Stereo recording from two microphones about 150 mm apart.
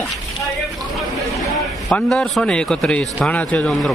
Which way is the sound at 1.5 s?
5° left (ahead or behind).